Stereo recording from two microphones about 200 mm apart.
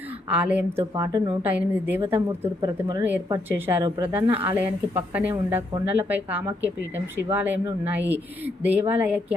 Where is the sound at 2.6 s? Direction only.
20° right (ahead or behind).